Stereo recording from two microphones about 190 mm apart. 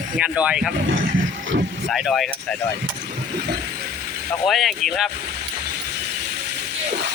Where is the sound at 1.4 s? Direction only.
70° right (ahead or behind).